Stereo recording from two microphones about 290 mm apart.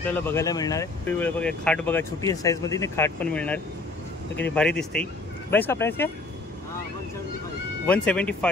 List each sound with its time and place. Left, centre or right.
0.3 s speech: centre
7.8 s speech: centre